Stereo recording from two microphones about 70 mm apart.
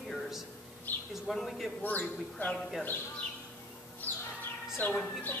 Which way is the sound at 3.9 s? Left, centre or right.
Left.